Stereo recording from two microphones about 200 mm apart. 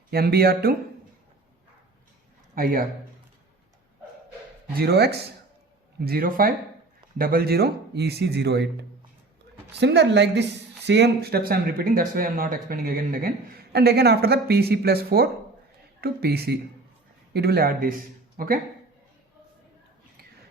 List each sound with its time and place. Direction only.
0.1 s speech: 50° right (ahead or behind)
2.6 s speech: 45° right (ahead or behind)
4.7 s speech: 50° right (ahead or behind)
9.7 s speech: 60° right (ahead or behind)